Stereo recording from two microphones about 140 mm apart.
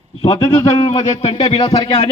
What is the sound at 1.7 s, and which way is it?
Speech, 25° left (ahead or behind).